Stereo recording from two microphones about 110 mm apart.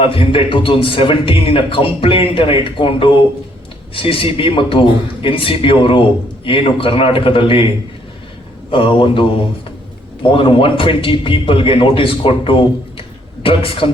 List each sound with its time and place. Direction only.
0.0 s a man's voice: 55° left (ahead or behind)
8.7 s a man's voice: 55° left (ahead or behind)
10.3 s a man's voice: 55° left (ahead or behind)